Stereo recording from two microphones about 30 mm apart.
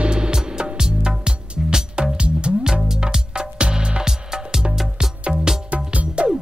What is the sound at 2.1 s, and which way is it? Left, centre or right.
Music, right.